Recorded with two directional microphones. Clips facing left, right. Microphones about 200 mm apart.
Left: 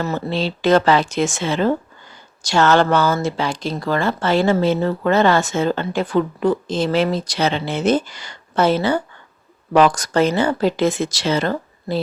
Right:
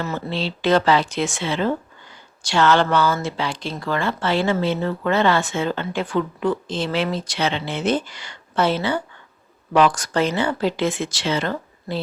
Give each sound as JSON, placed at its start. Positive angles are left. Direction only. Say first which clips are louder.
{"t": 0.0, "sound": "speech", "louder": "left 4 dB", "side_deg": 40}